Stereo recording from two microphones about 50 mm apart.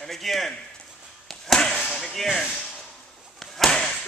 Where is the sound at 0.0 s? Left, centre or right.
Centre.